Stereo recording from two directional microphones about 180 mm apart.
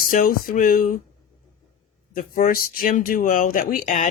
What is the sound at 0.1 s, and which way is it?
Speech, 50° left (ahead or behind).